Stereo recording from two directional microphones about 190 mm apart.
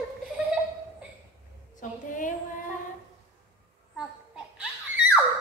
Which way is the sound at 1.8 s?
45° left (ahead or behind).